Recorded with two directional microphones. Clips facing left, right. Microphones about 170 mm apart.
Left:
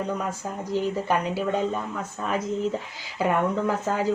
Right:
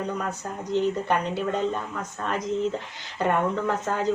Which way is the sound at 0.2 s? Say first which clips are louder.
Left 1 dB; 5° left (ahead or behind).